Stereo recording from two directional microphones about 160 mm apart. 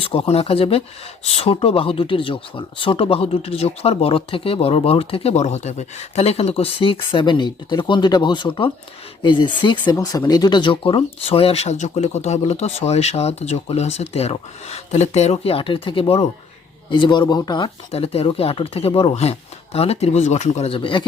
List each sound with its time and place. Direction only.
0.0 s speech: 35° left (ahead or behind)
17.9 s speech: 40° left (ahead or behind)